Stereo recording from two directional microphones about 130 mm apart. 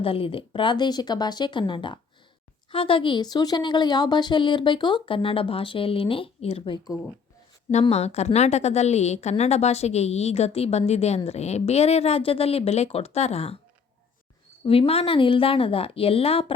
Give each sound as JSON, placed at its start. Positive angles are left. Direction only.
{"t": 0.0, "sound": "a woman's voice", "side_deg": 45}
{"t": 7.7, "sound": "a woman's voice", "side_deg": 55}
{"t": 14.6, "sound": "a woman's voice", "side_deg": 50}